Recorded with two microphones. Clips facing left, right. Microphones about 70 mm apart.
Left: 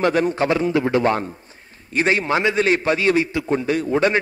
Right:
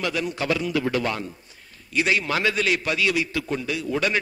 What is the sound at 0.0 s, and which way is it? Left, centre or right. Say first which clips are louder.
A man's voice: left 8 dB; left.